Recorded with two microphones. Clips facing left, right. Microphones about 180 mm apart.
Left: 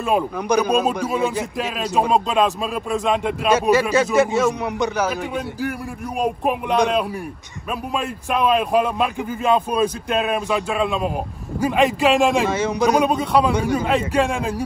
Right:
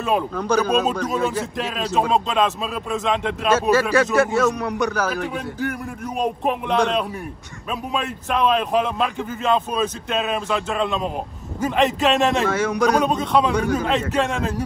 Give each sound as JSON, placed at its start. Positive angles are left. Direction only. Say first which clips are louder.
{"t": 0.0, "sound": "speech", "louder": "left 1 dB", "side_deg": 15}
{"t": 6.1, "sound": "speech", "louder": "left 1 dB", "side_deg": 5}
{"t": 12.4, "sound": "speech", "louder": "left 1 dB", "side_deg": 20}
{"t": 13.0, "sound": "speech", "louder": "left 1 dB", "side_deg": 5}